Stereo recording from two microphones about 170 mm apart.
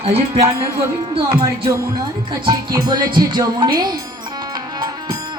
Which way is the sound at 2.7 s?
25° right (ahead or behind).